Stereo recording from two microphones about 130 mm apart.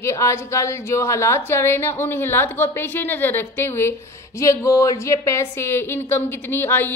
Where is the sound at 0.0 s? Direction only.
20° left (ahead or behind).